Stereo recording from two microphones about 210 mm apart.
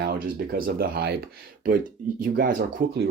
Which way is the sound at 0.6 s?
45° right (ahead or behind).